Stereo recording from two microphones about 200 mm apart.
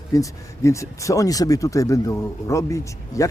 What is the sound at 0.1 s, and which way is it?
Speech, 15° left (ahead or behind).